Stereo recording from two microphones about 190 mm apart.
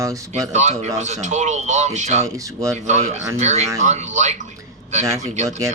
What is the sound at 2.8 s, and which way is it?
A man's voice, 40° right (ahead or behind).